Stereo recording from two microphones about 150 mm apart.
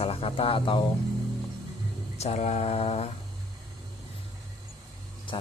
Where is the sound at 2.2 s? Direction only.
45° left (ahead or behind).